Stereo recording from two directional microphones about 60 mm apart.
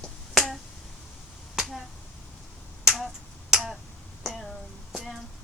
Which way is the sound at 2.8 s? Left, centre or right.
Centre.